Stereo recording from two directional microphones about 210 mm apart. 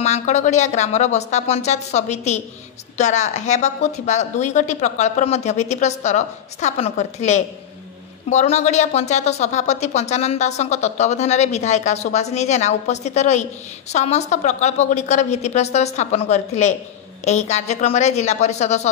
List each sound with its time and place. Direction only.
0.0 s a woman's voice: 35° left (ahead or behind)